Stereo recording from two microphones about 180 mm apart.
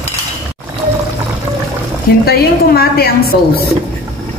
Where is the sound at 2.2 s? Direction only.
60° left (ahead or behind).